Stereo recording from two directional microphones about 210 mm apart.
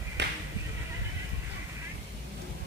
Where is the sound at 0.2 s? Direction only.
55° right (ahead or behind).